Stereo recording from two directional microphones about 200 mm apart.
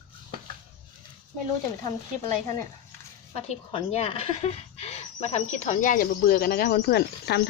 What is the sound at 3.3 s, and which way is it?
A woman's voice, 30° left (ahead or behind).